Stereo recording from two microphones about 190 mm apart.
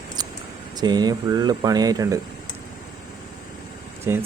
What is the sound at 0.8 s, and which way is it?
Speech, 20° right (ahead or behind).